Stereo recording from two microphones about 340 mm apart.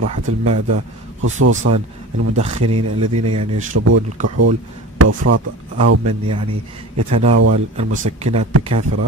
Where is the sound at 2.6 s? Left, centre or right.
Right.